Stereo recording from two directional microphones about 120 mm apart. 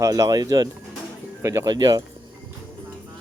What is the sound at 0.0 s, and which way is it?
Speech, 30° right (ahead or behind).